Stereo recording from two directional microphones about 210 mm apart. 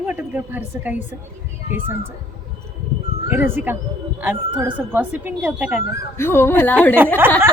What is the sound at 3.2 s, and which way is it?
Speech, 10° right (ahead or behind).